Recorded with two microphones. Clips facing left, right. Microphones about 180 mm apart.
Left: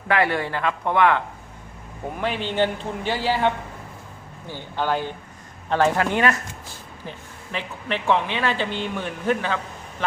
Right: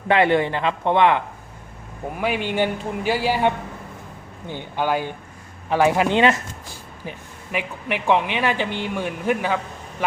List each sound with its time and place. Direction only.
0.1 s speech: 20° right (ahead or behind)
2.2 s a man's voice: 10° right (ahead or behind)